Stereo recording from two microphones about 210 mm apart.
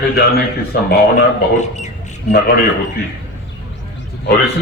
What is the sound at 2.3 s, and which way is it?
Speech, 45° left (ahead or behind).